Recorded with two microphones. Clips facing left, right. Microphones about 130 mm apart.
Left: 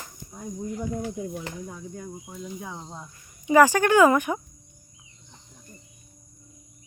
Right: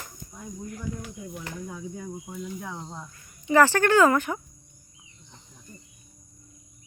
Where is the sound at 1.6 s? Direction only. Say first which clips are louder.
Right 1 dB; centre (ahead or behind); by 4.4 s 15° left (ahead or behind).